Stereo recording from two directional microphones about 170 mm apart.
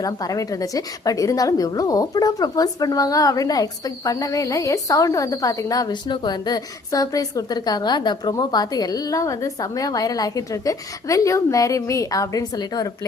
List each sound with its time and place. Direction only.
0.0 s a woman's voice: 20° left (ahead or behind)